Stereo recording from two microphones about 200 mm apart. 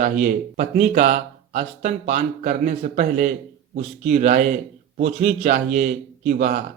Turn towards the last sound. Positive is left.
turn(degrees=-45)  # may be behind; listen again after turning